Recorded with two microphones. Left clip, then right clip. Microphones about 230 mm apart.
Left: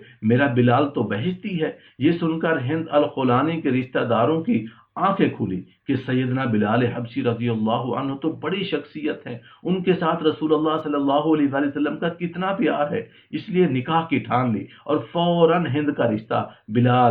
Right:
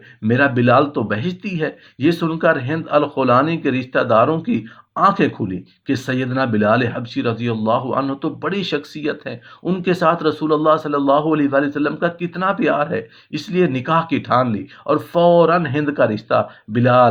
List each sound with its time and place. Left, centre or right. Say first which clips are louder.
0.3 s speech: right 4 dB; right